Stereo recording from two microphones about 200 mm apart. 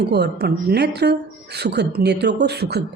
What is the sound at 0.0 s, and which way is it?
A woman's voice, 55° right (ahead or behind).